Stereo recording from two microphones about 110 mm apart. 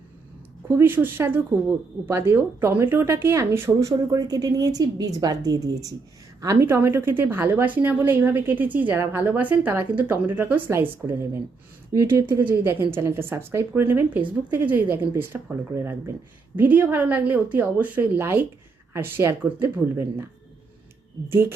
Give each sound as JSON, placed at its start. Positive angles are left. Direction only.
{"t": 0.7, "sound": "a woman's voice", "side_deg": -20}
{"t": 21.2, "sound": "a woman's voice", "side_deg": -25}